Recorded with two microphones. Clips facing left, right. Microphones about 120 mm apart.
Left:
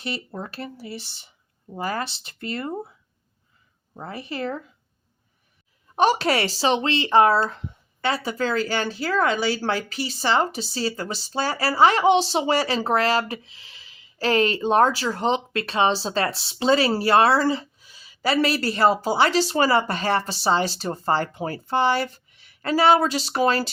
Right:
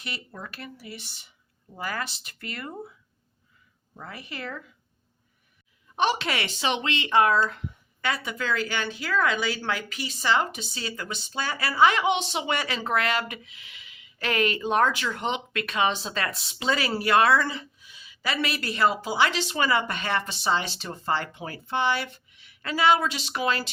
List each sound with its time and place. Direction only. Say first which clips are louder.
0.0 s speech: left 7 dB; 30° left (ahead or behind)
3.9 s speech: left 7 dB; 30° left (ahead or behind)
6.0 s speech: left 6 dB; 40° left (ahead or behind)